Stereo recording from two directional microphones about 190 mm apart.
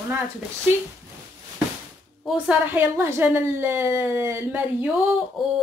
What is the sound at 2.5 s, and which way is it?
A woman's voice, 10° right (ahead or behind).